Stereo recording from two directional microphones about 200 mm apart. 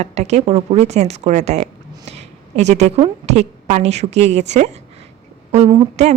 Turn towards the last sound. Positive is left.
turn(degrees=-35)  # may be behind; listen again after turning